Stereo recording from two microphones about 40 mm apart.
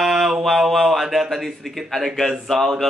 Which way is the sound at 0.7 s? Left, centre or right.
Centre.